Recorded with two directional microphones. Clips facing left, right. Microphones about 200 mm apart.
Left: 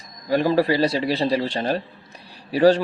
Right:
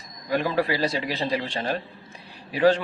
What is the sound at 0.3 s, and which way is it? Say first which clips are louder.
Speech: left 5 dB; 35° left (ahead or behind).